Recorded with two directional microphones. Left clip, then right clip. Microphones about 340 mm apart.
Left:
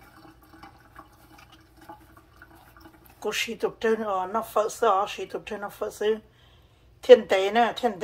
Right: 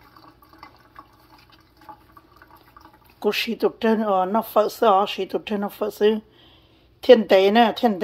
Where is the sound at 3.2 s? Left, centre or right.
Right.